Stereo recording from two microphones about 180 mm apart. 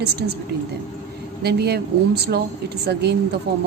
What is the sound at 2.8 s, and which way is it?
Speech, 65° right (ahead or behind).